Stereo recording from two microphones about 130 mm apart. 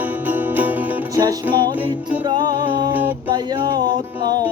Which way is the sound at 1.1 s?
30° right (ahead or behind).